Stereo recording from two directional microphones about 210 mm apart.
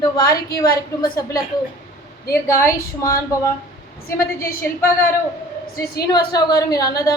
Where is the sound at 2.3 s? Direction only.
15° left (ahead or behind).